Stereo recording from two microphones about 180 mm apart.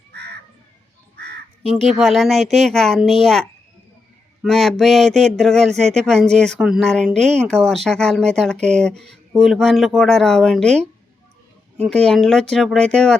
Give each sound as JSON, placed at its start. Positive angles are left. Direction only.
{"t": 0.1, "sound": "crow", "side_deg": -65}
{"t": 1.6, "sound": "speech", "side_deg": 0}
{"t": 8.5, "sound": "speech", "side_deg": -40}
{"t": 8.8, "sound": "speech", "side_deg": 5}
{"t": 11.8, "sound": "speech", "side_deg": 5}